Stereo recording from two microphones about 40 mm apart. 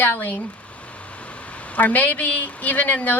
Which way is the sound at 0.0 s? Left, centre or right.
Left.